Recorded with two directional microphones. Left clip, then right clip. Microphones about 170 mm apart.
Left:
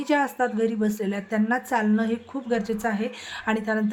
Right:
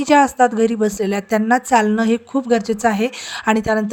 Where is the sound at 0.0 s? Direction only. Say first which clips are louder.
Right 10 dB; 40° right (ahead or behind).